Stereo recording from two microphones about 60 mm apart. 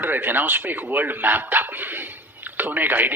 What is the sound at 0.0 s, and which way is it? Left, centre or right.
Speech, right.